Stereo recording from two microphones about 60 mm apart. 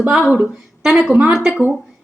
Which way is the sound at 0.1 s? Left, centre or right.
Centre.